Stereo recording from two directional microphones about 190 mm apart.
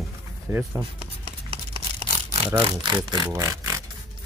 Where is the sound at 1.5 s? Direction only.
30° right (ahead or behind).